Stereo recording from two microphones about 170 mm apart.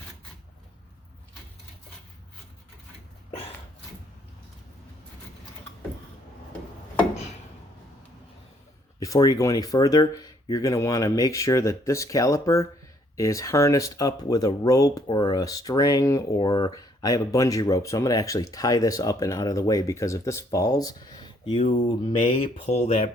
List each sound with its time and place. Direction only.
9.0 s speech: 20° left (ahead or behind)
21.8 s mantra: 30° left (ahead or behind)